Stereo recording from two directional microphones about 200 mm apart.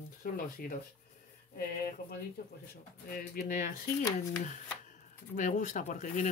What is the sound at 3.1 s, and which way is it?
Speech, 45° left (ahead or behind).